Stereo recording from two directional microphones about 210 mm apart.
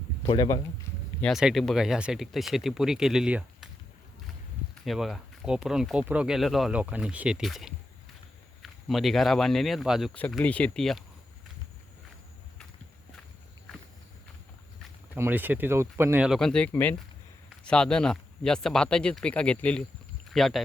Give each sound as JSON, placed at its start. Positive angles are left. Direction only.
{"t": 0.2, "sound": "speech", "side_deg": 20}
{"t": 1.2, "sound": "speech", "side_deg": 0}
{"t": 4.9, "sound": "speech", "side_deg": 0}
{"t": 15.1, "sound": "speech", "side_deg": -10}